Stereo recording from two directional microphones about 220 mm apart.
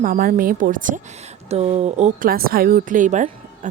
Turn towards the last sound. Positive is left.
turn(degrees=-35)  # may be behind; listen again after turning